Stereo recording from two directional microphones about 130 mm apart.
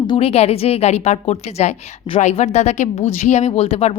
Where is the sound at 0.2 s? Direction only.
50° left (ahead or behind).